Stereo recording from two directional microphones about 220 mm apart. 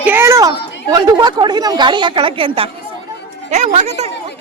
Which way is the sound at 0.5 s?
50° left (ahead or behind).